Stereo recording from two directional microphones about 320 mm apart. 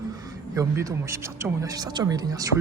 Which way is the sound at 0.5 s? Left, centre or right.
Centre.